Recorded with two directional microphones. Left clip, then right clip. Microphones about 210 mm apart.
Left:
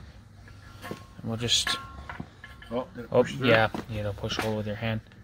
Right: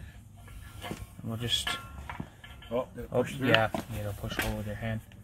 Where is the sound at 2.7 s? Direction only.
15° right (ahead or behind).